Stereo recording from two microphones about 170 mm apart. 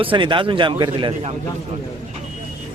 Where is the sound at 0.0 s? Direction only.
30° right (ahead or behind).